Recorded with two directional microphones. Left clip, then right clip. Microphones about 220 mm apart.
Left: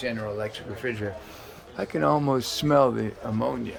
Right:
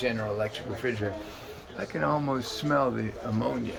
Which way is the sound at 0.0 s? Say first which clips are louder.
Right 1 dB; 5° left (ahead or behind).